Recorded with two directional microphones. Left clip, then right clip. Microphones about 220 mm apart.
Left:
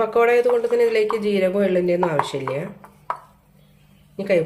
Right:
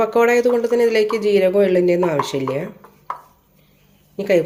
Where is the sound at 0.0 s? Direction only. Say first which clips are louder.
Right 2 dB; 25° right (ahead or behind).